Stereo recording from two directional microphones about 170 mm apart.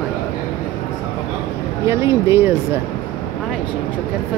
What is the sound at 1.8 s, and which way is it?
Speech, 15° right (ahead or behind).